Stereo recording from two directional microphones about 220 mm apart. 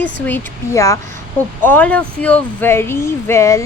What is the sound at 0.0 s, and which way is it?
A woman's voice, 10° left (ahead or behind).